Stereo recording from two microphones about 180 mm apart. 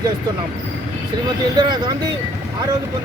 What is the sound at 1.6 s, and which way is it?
Speech, 25° right (ahead or behind).